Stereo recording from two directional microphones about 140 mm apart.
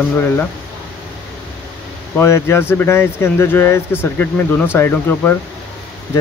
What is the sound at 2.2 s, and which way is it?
Speech, 20° left (ahead or behind).